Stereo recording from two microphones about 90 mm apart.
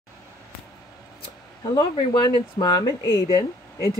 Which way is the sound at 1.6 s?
45° left (ahead or behind).